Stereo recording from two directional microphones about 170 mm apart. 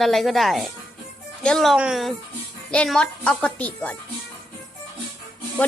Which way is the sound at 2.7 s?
5° left (ahead or behind).